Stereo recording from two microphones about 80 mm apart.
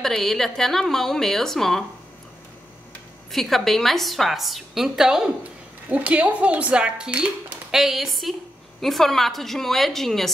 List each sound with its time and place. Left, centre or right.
0.0 s a woman's voice: centre
3.3 s a woman's voice: centre
5.9 s speech: centre
7.7 s a woman's voice: centre